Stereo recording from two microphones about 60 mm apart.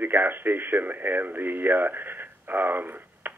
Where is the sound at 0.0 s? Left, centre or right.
Right.